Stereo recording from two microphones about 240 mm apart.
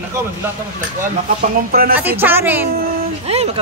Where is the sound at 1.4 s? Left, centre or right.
Right.